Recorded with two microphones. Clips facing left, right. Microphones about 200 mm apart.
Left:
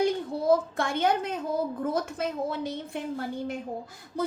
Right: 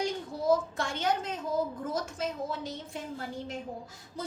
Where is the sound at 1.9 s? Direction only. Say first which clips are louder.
Left 4 dB; 60° left (ahead or behind).